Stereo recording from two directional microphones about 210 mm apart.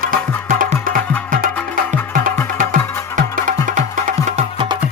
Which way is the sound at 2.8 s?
15° left (ahead or behind).